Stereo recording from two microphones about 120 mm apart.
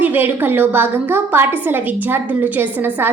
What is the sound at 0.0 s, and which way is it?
A woman's voice, 15° right (ahead or behind).